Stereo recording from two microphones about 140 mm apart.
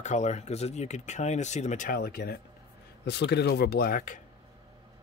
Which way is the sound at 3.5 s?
85° left.